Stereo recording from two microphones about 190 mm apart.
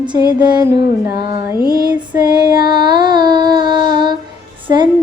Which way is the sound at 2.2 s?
25° right (ahead or behind).